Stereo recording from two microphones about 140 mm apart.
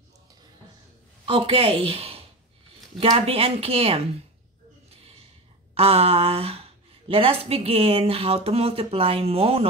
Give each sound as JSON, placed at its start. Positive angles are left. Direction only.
{"t": 1.2, "sound": "a woman's voice", "side_deg": -40}
{"t": 5.8, "sound": "speech", "side_deg": -45}